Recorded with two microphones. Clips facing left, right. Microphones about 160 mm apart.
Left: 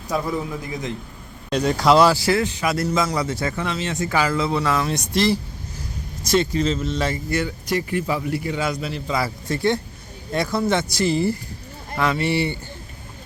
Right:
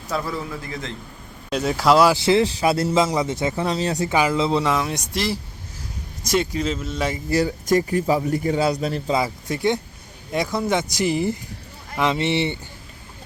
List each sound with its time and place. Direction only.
0.1 s a man's voice: 15° left (ahead or behind)
1.5 s speech: 5° right (ahead or behind)
2.0 s a man's voice: 20° right (ahead or behind)
4.1 s speech: 20° right (ahead or behind)
7.3 s a man's voice: 35° right (ahead or behind)
9.1 s a man's voice: 15° right (ahead or behind)